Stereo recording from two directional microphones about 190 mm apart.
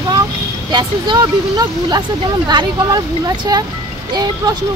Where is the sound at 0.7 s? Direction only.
25° right (ahead or behind).